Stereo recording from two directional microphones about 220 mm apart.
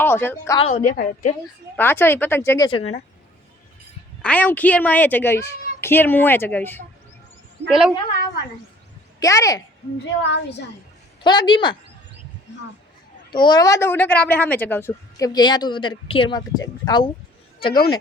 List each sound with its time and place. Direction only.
0.0 s speech: 10° left (ahead or behind)
0.6 s a woman's voice: 30° left (ahead or behind)
1.7 s a woman's voice: 10° left (ahead or behind)
4.2 s a woman's voice: 5° left (ahead or behind)
7.7 s a woman's voice: centre (ahead or behind)
9.2 s a woman's voice: 15° left (ahead or behind)
10.2 s a woman's voice: 50° left (ahead or behind)
11.2 s a woman's voice: 20° left (ahead or behind)
13.3 s a woman's voice: 20° left (ahead or behind)